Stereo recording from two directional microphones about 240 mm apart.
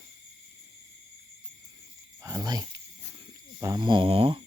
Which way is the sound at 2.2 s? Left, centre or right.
Centre.